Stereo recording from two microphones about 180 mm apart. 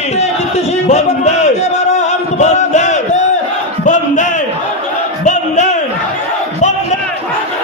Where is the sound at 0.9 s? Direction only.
40° left (ahead or behind).